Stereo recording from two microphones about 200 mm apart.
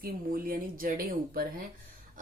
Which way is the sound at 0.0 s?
45° right (ahead or behind).